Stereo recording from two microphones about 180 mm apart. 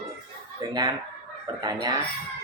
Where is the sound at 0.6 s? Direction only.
20° right (ahead or behind).